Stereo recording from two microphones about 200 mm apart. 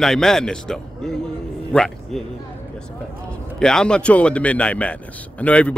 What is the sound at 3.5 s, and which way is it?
A man's voice, 5° left (ahead or behind).